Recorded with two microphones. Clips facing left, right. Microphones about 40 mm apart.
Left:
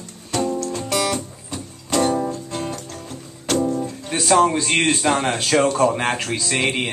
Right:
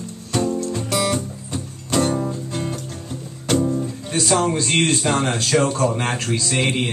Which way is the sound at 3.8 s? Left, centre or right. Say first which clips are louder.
Right 1 dB; centre.